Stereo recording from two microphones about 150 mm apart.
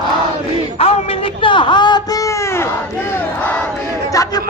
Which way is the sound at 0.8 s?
40° left (ahead or behind).